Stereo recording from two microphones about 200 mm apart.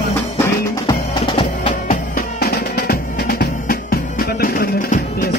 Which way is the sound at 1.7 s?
40° left (ahead or behind).